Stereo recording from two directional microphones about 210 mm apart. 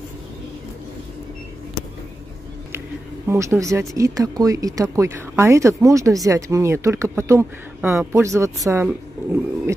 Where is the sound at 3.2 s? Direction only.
15° right (ahead or behind).